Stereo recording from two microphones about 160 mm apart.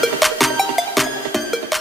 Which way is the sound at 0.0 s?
Centre (ahead or behind).